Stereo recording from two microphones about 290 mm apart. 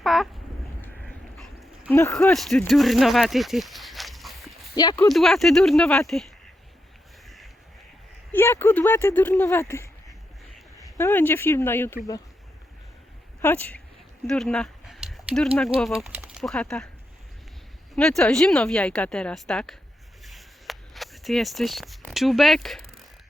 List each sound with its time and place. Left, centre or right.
0.0 s a sound: centre
0.8 s crow: centre
4.7 s speech: centre
5.0 s speech: centre
8.3 s speech: centre
13.4 s speech: centre
17.9 s speech: centre
20.2 s a sound: centre